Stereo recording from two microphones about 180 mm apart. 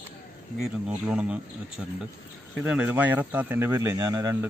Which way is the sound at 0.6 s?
5° right (ahead or behind).